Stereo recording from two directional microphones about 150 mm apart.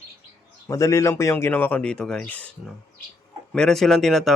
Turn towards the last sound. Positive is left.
turn(degrees=0)  # may be behind; listen again after turning